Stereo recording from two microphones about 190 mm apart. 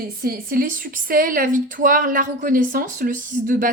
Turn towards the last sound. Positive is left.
turn(degrees=-45)  # may be behind; listen again after turning